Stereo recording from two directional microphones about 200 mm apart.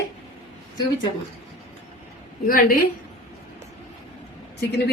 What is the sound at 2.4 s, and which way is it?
Speech, 45° left (ahead or behind).